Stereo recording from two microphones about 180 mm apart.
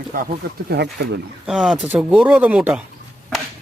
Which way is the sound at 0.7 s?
65° right (ahead or behind).